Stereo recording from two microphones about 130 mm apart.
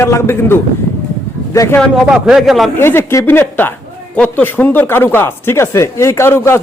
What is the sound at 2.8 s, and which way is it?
Speech, 20° left (ahead or behind).